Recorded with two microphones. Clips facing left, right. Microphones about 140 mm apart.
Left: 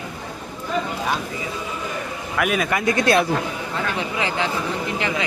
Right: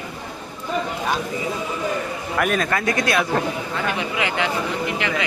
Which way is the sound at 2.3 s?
5° left (ahead or behind).